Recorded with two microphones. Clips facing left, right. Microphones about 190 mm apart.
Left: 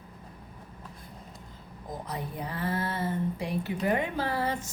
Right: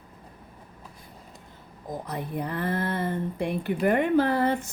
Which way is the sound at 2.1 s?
55° right (ahead or behind).